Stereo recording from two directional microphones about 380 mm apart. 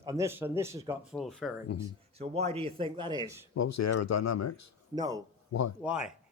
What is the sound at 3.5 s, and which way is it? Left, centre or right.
Speech, left.